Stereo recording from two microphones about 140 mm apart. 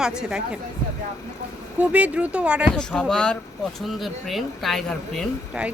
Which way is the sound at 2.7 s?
5° left (ahead or behind).